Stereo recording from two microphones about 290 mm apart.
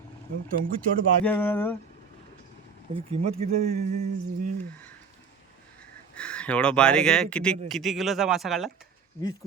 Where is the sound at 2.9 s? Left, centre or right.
Centre.